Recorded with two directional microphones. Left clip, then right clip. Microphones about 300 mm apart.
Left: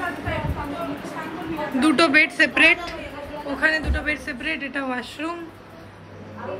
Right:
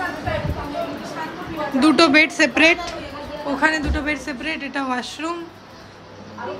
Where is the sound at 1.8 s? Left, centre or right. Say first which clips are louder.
Right 3 dB; centre.